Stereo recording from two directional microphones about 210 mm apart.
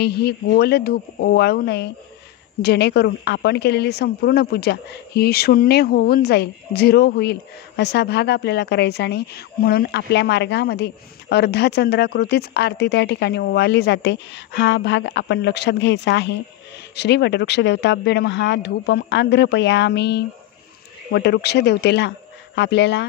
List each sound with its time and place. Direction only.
0.0 s speech: 50° left (ahead or behind)